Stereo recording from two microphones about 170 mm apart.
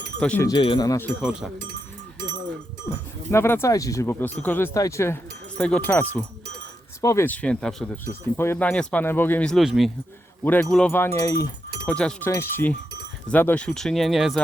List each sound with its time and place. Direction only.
0.2 s speech: 5° left (ahead or behind)
0.4 s speech: 30° left (ahead or behind)
1.2 s speech: 5° right (ahead or behind)
3.2 s speech: 15° left (ahead or behind)
8.0 s speech: 15° left (ahead or behind)
10.4 s speech: 10° left (ahead or behind)
11.9 s speech: 5° left (ahead or behind)